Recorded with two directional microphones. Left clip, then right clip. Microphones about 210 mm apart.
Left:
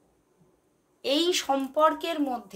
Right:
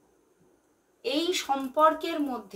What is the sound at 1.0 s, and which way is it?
Speech, 50° left (ahead or behind).